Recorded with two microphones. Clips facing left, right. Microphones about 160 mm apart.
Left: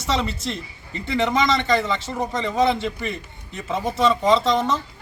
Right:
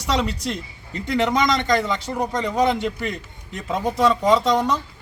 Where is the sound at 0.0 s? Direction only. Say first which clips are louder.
Right 1 dB; 15° right (ahead or behind).